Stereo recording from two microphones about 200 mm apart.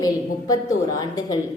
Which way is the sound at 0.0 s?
15° left (ahead or behind).